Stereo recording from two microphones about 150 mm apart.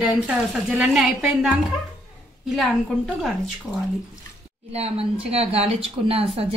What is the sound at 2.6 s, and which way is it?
Speech, centre (ahead or behind).